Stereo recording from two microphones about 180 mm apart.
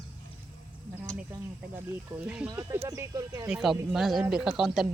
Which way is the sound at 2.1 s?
5° right (ahead or behind).